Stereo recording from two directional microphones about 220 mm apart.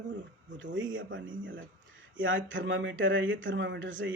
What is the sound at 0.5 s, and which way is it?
Speech, 60° right (ahead or behind).